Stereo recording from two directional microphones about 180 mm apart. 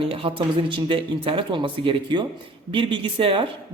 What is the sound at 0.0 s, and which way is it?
A man's voice, 30° right (ahead or behind).